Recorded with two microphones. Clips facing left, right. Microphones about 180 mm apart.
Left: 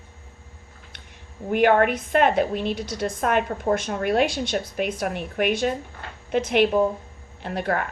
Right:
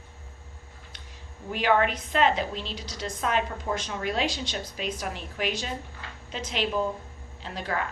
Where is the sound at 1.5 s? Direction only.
55° left (ahead or behind).